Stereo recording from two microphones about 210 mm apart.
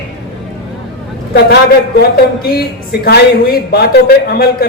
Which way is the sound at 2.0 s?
50° left (ahead or behind).